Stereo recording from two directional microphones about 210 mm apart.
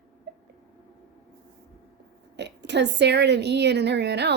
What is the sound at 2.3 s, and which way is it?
A woman's voice, 55° right (ahead or behind).